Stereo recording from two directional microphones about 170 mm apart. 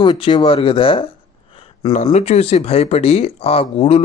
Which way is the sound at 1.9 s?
45° left (ahead or behind).